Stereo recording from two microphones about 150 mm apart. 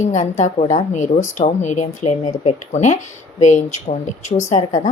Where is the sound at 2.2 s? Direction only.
40° left (ahead or behind).